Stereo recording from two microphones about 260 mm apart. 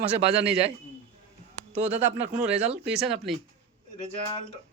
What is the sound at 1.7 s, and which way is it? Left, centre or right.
Speech, right.